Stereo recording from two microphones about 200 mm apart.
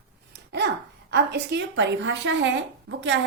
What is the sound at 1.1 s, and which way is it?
A woman's voice, 60° right (ahead or behind).